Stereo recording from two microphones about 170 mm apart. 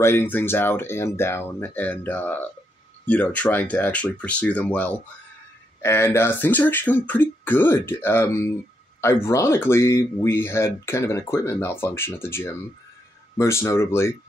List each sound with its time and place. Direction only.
0.0 s speech: 15° left (ahead or behind)